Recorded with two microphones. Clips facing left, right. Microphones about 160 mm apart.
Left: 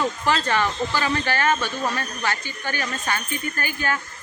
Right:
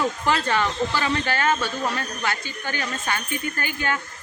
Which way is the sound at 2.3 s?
15° right (ahead or behind).